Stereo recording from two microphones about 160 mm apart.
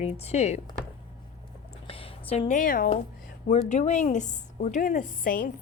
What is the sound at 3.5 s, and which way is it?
A woman's voice, 45° left (ahead or behind).